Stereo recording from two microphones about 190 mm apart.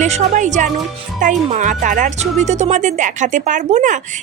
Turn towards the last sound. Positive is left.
turn(degrees=-40)  # may be behind; listen again after turning